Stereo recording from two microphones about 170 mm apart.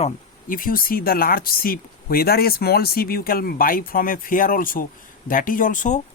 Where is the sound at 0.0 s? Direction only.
55° left (ahead or behind).